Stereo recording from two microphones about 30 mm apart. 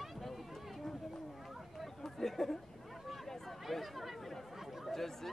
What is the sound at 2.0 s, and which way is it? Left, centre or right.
Speech, centre.